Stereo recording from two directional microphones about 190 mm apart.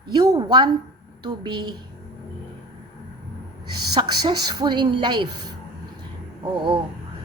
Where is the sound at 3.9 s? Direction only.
20° right (ahead or behind).